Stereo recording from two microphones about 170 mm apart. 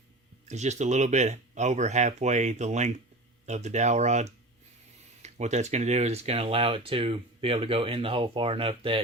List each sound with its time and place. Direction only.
0.4 s speech: 40° right (ahead or behind)